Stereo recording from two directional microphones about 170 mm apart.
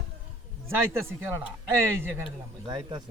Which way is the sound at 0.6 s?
15° right (ahead or behind).